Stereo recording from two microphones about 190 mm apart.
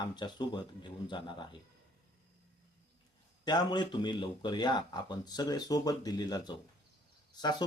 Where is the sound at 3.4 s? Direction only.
20° left (ahead or behind).